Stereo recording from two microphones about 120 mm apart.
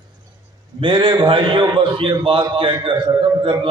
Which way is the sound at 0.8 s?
40° right (ahead or behind).